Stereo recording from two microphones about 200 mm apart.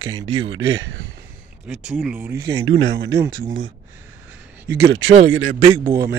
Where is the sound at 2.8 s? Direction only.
55° right (ahead or behind).